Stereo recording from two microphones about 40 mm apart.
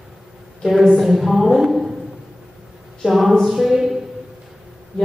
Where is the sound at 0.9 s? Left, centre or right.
Centre.